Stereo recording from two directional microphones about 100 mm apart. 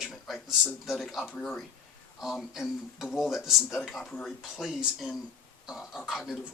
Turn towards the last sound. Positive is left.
turn(degrees=-5)  # may be behind; listen again after turning